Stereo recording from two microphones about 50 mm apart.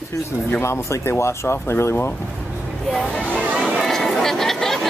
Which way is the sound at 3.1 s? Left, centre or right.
Left.